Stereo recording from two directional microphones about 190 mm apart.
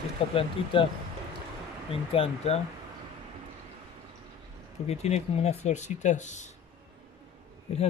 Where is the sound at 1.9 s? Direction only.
30° left (ahead or behind).